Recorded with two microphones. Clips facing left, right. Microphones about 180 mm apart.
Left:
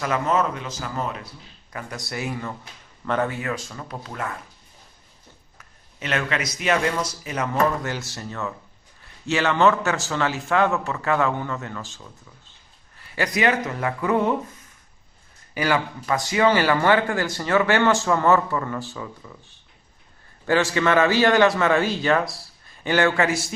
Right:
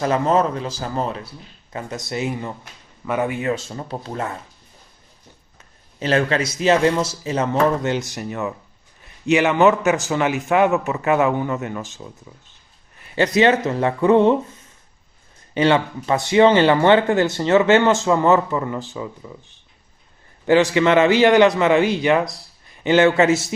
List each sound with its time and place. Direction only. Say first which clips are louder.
0.0 s a man's voice: right 5 dB; 30° right (ahead or behind)
5.5 s a man's voice: right 8 dB; 30° right (ahead or behind)
15.5 s speech: right 6 dB; 25° right (ahead or behind)